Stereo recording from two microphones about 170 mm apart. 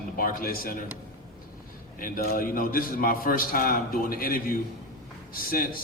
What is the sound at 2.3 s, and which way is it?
A man's voice, 55° left (ahead or behind).